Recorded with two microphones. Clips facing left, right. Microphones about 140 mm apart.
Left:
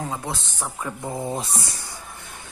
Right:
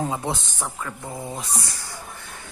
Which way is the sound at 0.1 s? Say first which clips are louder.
Right 3 dB; 20° right (ahead or behind).